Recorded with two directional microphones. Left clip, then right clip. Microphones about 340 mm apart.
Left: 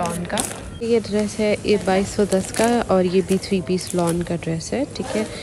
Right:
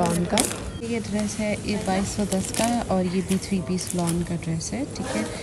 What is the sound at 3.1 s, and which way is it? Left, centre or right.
Speech, centre.